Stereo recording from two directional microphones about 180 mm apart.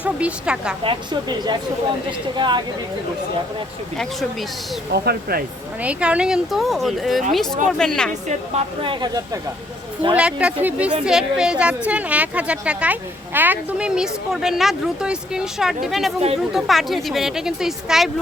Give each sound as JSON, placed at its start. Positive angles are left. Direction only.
{"t": 0.0, "sound": "a woman's voice", "side_deg": -5}
{"t": 0.9, "sound": "speech", "side_deg": -25}
{"t": 3.9, "sound": "a woman's voice", "side_deg": 0}
{"t": 4.9, "sound": "speech", "side_deg": -60}
{"t": 5.8, "sound": "a woman's voice", "side_deg": -5}
{"t": 8.3, "sound": "speech", "side_deg": -30}
{"t": 10.2, "sound": "a woman's voice", "side_deg": -5}